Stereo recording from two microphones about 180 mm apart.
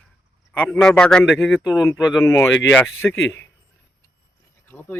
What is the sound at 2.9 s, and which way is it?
Speech, 90° left.